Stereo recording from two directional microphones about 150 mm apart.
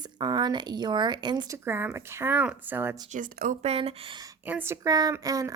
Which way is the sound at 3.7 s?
40° right (ahead or behind).